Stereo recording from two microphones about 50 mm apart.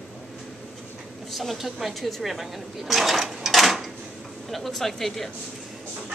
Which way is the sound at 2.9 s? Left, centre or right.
Centre.